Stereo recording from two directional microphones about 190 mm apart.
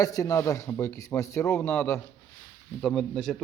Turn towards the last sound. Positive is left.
turn(degrees=0)  # may be behind; listen again after turning